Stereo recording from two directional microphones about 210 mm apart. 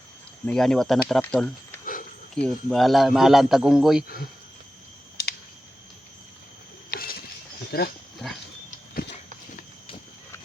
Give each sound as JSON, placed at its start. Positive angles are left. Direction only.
{"t": 0.4, "sound": "a man's voice", "side_deg": 5}
{"t": 1.8, "sound": "cricket", "side_deg": 40}
{"t": 2.3, "sound": "a man's voice", "side_deg": 0}
{"t": 6.9, "sound": "a sound", "side_deg": 45}
{"t": 7.7, "sound": "speech", "side_deg": 45}